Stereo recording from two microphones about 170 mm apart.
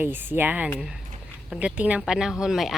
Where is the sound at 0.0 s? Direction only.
10° right (ahead or behind).